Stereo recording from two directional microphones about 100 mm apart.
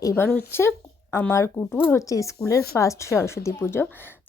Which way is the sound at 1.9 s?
30° left (ahead or behind).